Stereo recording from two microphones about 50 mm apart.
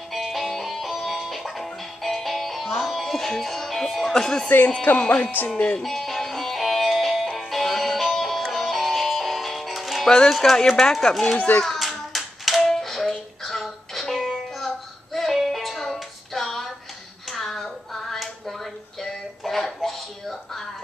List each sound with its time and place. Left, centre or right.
0.1 s music: centre
4.9 s speech: left
5.8 s music: centre
10.0 s speech: centre
11.3 s a child's voice: left
11.6 s hands: centre
12.6 s music: centre
15.1 s child singing: centre
17.3 s a sound: centre